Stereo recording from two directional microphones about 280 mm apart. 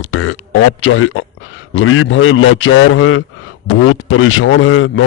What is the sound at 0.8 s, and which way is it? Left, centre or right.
Speech, left.